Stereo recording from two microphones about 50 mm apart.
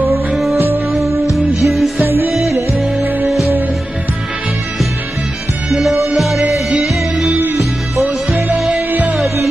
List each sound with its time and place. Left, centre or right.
0.3 s music: centre
2.0 s music: right
2.4 s music: right
3.2 s music: centre
5.7 s music: centre
8.5 s music: centre
8.9 s music: right